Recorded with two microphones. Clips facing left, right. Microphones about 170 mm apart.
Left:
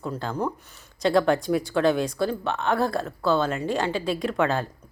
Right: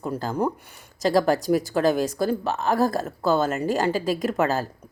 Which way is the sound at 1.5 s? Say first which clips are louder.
Right 1 dB; 40° right (ahead or behind).